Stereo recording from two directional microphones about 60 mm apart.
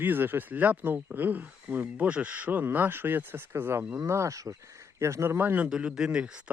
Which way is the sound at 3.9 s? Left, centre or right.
Right.